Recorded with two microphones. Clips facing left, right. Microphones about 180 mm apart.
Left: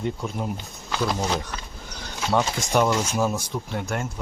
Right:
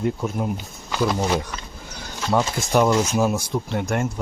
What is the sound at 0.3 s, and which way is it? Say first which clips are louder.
Speech: right 4 dB; 5° right (ahead or behind).